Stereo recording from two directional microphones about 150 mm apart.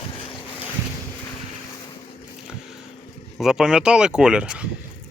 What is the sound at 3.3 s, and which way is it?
Speech, 5° right (ahead or behind).